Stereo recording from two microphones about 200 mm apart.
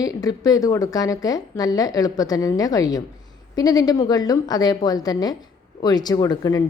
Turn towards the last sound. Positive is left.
turn(degrees=15)  # may be behind; listen again after turning